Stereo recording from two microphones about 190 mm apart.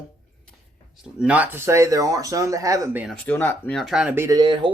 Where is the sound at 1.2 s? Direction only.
10° right (ahead or behind).